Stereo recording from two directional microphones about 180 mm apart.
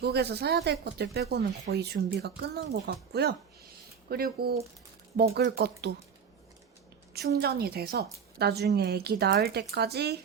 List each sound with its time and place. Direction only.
0.0 s a woman's voice: 65° right (ahead or behind)
7.1 s a woman's voice: 60° right (ahead or behind)